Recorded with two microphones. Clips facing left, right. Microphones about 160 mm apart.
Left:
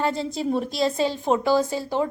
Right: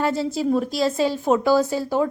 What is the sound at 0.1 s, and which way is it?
A woman's voice, 5° right (ahead or behind).